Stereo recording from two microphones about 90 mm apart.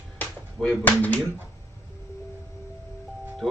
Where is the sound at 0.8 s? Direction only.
15° left (ahead or behind).